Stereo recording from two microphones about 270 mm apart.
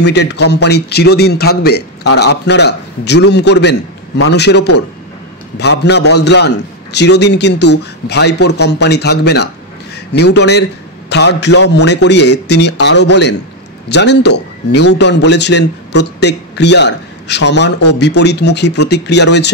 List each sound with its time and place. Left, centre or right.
0.0 s a man's voice: left